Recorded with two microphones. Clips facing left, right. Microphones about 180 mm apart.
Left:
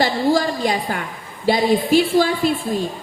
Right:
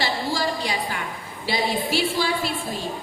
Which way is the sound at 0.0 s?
45° left (ahead or behind).